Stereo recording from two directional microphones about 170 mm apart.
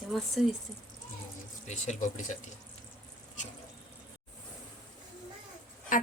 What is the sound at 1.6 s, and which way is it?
Speech, 45° left (ahead or behind).